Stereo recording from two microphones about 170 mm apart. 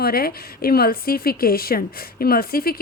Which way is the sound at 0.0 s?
65° left (ahead or behind).